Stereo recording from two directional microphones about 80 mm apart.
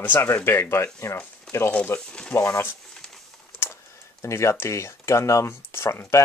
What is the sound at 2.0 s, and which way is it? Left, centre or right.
Speech, centre.